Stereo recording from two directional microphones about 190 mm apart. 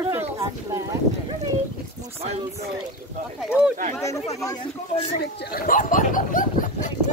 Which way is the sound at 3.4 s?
5° right (ahead or behind).